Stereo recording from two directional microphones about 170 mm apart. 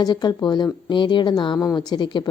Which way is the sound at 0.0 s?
25° left (ahead or behind).